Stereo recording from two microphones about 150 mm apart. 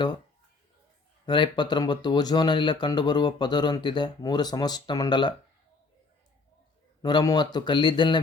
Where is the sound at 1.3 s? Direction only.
30° left (ahead or behind).